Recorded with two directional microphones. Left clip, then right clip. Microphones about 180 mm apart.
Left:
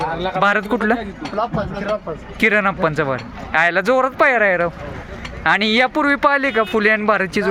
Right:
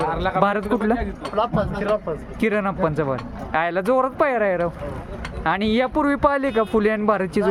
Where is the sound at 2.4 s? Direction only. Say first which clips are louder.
Left 6 dB; 5° right (ahead or behind).